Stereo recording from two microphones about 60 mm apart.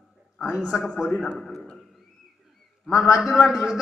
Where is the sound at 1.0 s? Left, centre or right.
Centre.